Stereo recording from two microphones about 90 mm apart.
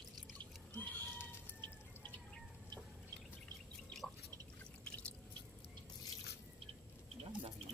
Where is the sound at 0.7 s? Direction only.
20° left (ahead or behind).